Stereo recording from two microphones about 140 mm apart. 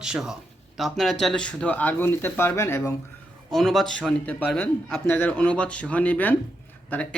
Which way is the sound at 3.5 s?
Centre (ahead or behind).